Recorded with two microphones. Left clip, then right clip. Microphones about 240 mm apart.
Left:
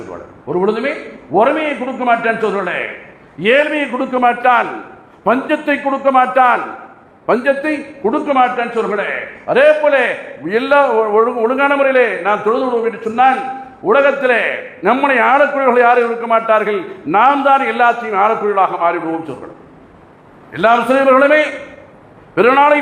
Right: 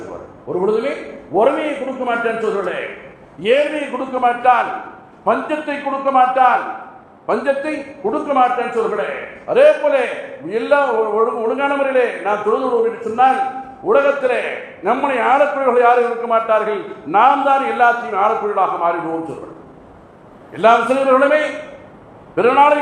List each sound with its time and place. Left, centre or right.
0.5 s a man's voice: left
20.5 s a man's voice: left